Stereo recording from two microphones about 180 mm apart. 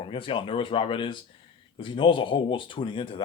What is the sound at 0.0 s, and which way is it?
Speech, 30° left (ahead or behind).